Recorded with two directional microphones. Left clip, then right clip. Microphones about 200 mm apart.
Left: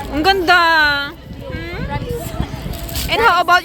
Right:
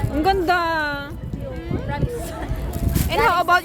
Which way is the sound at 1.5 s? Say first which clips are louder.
Left 4 dB; 10° left (ahead or behind).